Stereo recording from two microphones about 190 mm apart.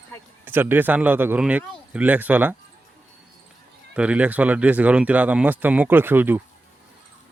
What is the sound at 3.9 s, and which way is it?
Speech, 5° right (ahead or behind).